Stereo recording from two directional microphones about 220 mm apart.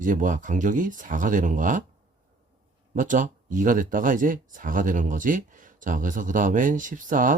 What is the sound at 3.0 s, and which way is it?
Speech, 35° right (ahead or behind).